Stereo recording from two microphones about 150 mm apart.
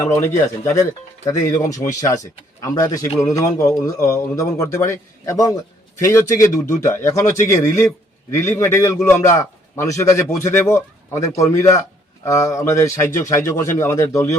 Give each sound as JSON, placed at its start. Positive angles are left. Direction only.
{"t": 0.0, "sound": "a man's voice", "side_deg": 20}